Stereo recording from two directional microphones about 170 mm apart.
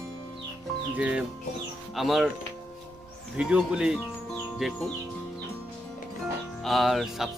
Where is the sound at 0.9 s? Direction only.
10° right (ahead or behind).